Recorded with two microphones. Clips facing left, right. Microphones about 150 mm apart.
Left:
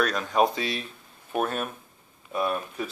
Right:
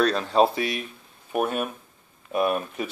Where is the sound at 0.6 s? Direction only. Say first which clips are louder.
Right 3 dB; 25° left (ahead or behind).